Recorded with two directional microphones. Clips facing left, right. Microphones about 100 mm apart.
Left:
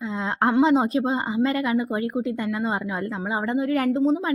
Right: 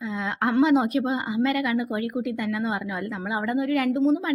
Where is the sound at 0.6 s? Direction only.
30° left (ahead or behind).